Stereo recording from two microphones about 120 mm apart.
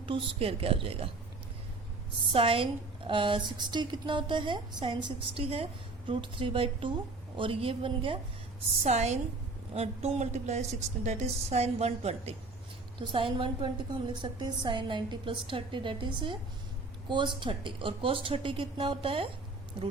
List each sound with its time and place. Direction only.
0.0 s a woman's voice: 50° right (ahead or behind)
2.3 s a woman's voice: 50° right (ahead or behind)
8.8 s a woman's voice: 70° right (ahead or behind)
9.7 s a woman's voice: 55° right (ahead or behind)
13.0 s a woman's voice: 45° right (ahead or behind)